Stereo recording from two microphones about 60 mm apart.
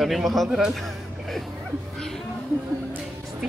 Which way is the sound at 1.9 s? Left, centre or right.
Centre.